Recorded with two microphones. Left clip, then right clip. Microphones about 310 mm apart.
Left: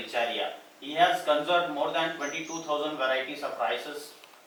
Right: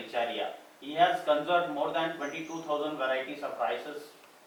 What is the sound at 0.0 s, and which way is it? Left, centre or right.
A man's voice, centre.